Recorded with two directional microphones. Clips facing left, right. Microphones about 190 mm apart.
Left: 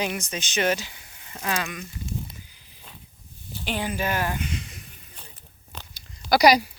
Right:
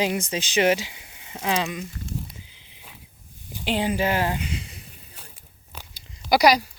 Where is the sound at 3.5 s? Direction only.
20° right (ahead or behind).